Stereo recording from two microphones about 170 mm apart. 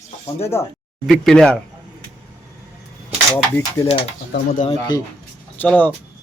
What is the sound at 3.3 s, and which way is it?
Speech, 15° left (ahead or behind).